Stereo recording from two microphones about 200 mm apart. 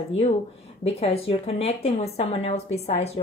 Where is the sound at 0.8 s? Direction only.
30° left (ahead or behind).